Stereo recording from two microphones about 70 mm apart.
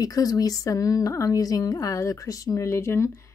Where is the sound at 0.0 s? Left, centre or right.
Left.